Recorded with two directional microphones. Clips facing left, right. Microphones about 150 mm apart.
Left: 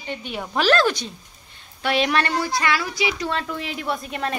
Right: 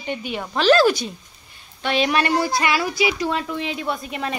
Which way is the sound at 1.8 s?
Centre (ahead or behind).